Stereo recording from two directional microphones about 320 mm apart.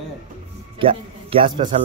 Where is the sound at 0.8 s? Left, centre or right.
Centre.